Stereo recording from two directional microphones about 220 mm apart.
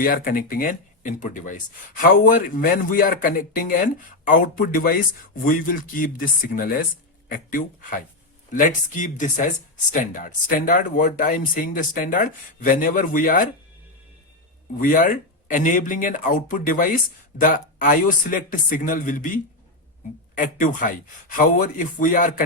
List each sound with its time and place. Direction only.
0.0 s speech: 40° left (ahead or behind)
14.8 s speech: 40° left (ahead or behind)